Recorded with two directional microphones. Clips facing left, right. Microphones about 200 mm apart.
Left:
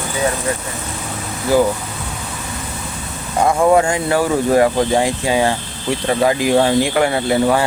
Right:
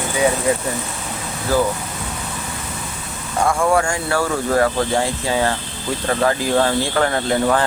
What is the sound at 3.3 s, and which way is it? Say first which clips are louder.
Speech: left 4 dB; 20° left (ahead or behind).